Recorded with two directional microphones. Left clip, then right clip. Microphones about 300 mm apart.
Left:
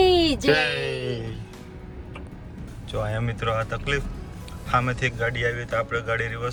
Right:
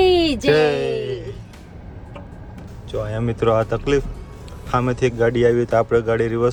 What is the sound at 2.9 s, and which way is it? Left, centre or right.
A man's voice, centre.